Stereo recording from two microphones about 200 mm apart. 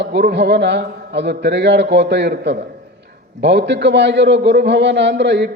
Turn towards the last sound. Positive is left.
turn(degrees=-60)  # may be behind; listen again after turning